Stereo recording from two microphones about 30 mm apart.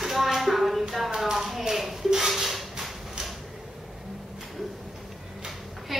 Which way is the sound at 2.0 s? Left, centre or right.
Centre.